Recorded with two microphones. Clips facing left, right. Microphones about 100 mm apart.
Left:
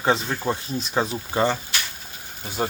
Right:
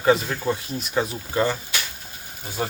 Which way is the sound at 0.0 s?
25° left (ahead or behind).